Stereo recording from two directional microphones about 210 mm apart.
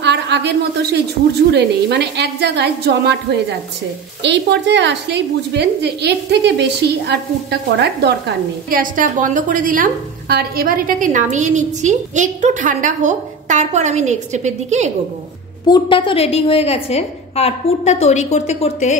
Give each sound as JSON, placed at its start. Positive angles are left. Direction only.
{"t": 0.0, "sound": "a sound", "side_deg": -55}
{"t": 1.5, "sound": "a woman's voice", "side_deg": -50}
{"t": 15.6, "sound": "a woman's voice", "side_deg": 20}